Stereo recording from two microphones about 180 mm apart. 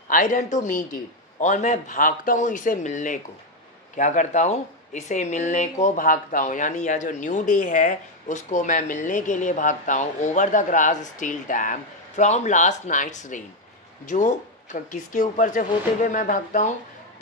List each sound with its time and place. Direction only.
0.1 s speech: 50° left (ahead or behind)